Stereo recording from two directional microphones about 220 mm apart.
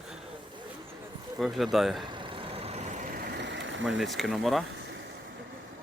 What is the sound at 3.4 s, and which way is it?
Engine, 55° right (ahead or behind).